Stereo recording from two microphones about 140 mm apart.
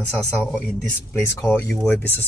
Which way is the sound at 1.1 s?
20° left (ahead or behind).